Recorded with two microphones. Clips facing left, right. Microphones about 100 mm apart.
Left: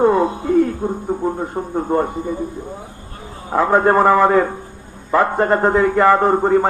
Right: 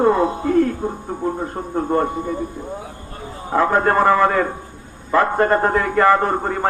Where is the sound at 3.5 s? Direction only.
10° left (ahead or behind).